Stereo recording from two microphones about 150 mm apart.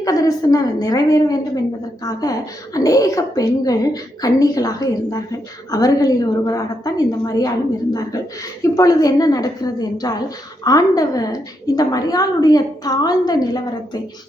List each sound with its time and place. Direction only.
0.0 s a woman's voice: 25° left (ahead or behind)
8.6 s a woman's voice: 20° left (ahead or behind)